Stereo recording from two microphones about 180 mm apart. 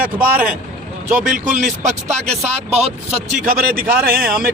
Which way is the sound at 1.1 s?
50° right (ahead or behind).